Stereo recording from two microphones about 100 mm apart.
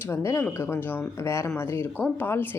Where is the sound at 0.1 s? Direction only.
25° left (ahead or behind).